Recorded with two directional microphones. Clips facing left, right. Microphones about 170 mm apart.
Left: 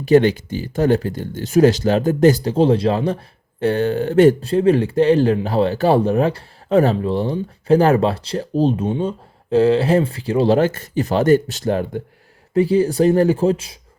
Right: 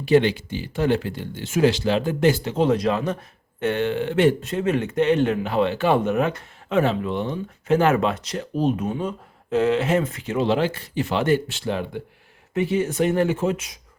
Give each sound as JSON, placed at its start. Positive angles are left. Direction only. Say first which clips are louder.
{"t": 0.0, "sound": "speech", "louder": "left 4 dB", "side_deg": 40}